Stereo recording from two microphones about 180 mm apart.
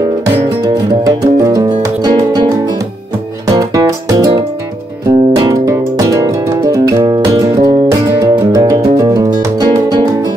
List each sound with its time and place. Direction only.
0.7 s music: 20° right (ahead or behind)
3.5 s music: 20° right (ahead or behind)